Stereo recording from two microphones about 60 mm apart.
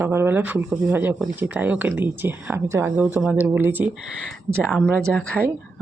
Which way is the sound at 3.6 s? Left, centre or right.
Right.